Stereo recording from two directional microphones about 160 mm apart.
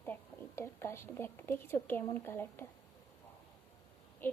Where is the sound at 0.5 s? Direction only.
15° left (ahead or behind).